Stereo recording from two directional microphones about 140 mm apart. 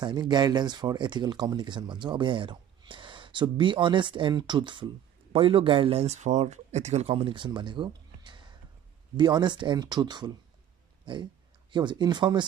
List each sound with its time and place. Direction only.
0.0 s speech: 30° right (ahead or behind); by 7.2 s 50° right (ahead or behind)
7.2 s speech: 35° right (ahead or behind)